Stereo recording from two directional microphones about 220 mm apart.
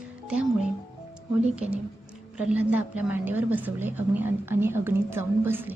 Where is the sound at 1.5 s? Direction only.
5° right (ahead or behind).